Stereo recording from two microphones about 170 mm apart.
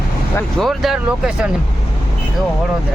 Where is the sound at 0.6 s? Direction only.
Centre (ahead or behind).